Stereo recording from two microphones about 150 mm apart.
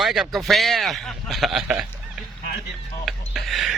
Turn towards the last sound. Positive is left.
turn(degrees=0)  # may be behind; listen again after turning